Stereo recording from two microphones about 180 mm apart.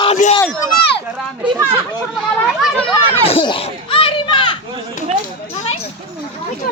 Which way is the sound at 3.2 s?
30° left (ahead or behind).